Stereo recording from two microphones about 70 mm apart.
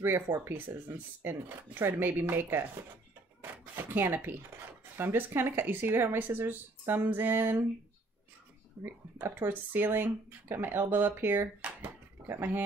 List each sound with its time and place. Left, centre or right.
0.0 s speech: right
3.7 s speech: right
8.8 s speech: right